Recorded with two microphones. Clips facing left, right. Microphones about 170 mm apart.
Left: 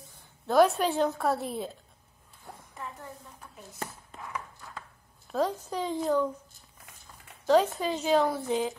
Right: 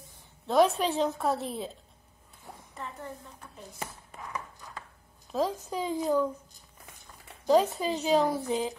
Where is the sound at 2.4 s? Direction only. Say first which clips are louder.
Even; centre (ahead or behind).